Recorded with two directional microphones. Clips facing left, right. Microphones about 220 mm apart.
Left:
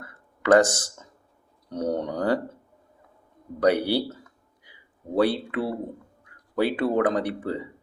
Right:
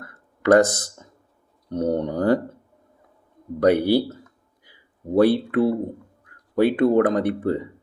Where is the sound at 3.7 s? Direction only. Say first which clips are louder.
Right 5 dB; 50° right (ahead or behind).